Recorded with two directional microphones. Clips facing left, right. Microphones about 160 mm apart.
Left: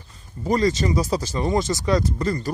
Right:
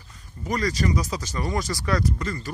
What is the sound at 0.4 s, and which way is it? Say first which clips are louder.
Speech: left 5 dB; 30° left (ahead or behind).